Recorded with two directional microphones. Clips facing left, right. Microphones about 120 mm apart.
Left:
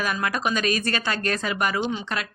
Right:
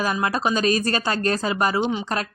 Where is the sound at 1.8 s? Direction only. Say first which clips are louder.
Right 3 dB; 20° right (ahead or behind).